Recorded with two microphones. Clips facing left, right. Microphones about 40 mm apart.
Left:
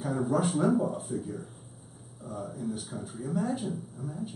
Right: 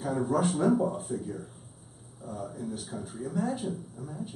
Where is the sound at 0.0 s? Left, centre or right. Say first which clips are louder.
Right 1 dB; centre.